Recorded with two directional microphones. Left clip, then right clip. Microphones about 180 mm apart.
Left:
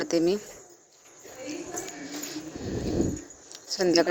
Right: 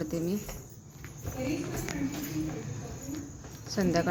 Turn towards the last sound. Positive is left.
turn(degrees=40)  # may be behind; listen again after turning